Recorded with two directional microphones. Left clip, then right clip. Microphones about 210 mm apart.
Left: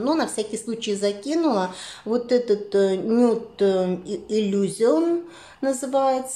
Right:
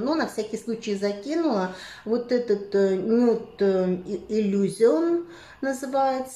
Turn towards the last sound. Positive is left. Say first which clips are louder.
# left 3 dB
turn(degrees=0)  # may be behind; listen again after turning